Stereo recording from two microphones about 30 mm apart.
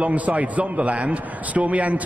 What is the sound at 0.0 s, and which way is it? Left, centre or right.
A man's voice, right.